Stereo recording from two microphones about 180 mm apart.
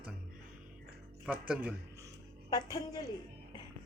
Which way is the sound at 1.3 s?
5° right (ahead or behind).